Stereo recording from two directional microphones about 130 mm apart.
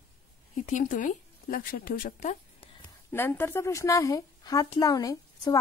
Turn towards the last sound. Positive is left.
turn(degrees=30)  # may be behind; listen again after turning